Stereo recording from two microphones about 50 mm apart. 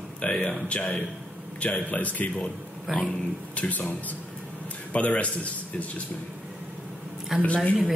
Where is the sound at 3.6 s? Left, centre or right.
Left.